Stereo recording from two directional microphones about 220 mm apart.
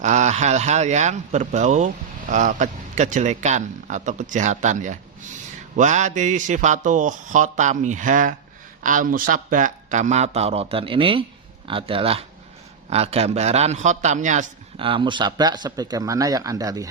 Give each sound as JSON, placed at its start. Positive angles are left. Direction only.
{"t": 0.0, "sound": "a man's voice", "side_deg": -30}